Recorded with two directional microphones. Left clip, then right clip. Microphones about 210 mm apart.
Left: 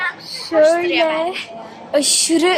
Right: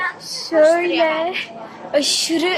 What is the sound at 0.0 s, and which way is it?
A child's voice, centre (ahead or behind).